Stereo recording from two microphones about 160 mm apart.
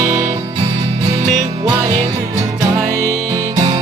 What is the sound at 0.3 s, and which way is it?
Music, 30° right (ahead or behind).